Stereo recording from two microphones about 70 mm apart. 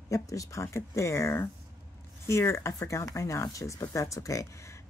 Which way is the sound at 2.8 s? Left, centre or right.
Left.